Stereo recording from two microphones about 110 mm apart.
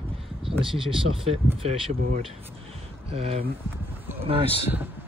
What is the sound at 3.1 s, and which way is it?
Speech, 65° right (ahead or behind).